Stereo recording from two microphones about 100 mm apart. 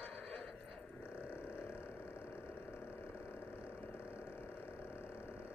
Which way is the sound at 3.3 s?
25° left (ahead or behind).